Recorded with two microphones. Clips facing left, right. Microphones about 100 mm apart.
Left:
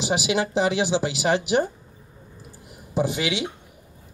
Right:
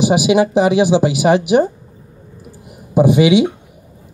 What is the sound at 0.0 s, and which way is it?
Speech, 15° right (ahead or behind).